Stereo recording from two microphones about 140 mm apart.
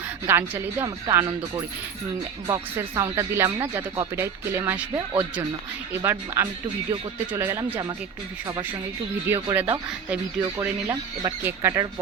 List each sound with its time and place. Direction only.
0.3 s speech: 15° right (ahead or behind)
2.5 s speech: 20° right (ahead or behind)
9.2 s speech: 15° right (ahead or behind)
11.2 s speech: 20° right (ahead or behind)